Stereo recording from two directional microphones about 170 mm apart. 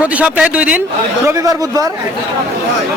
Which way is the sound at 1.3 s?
20° right (ahead or behind).